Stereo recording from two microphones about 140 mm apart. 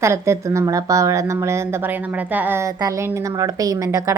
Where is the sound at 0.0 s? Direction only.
20° right (ahead or behind).